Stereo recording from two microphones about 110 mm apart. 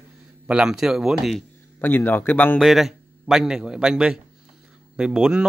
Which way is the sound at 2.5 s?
Centre (ahead or behind).